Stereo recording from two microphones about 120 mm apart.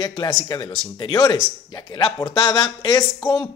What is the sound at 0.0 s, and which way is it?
Speech, 35° left (ahead or behind).